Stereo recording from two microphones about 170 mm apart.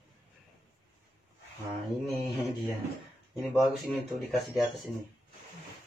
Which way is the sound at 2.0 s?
Centre (ahead or behind).